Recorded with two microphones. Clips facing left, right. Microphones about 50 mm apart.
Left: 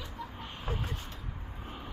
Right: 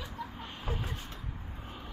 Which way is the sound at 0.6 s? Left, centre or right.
Centre.